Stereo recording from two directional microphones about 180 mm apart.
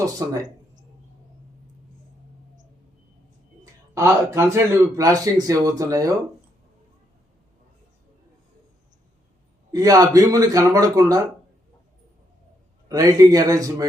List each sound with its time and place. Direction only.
0.0 s speech: 20° right (ahead or behind)
3.9 s speech: 15° right (ahead or behind)
9.7 s speech: 20° right (ahead or behind)
12.9 s speech: 20° right (ahead or behind)